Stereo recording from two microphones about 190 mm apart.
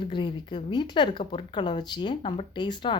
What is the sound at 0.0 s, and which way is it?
Speech, 25° left (ahead or behind).